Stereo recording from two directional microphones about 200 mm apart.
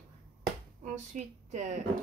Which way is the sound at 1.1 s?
35° right (ahead or behind).